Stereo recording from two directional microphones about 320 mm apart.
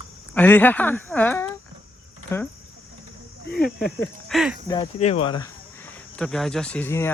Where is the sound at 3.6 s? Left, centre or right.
Centre.